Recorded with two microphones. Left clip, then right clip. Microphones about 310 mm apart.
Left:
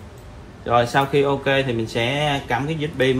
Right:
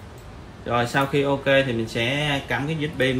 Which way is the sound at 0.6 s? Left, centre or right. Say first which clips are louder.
Left 4 dB; centre.